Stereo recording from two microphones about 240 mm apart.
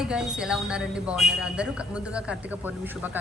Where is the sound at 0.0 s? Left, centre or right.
Centre.